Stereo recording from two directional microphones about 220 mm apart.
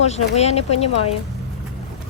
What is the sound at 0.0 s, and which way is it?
Speech, 30° left (ahead or behind).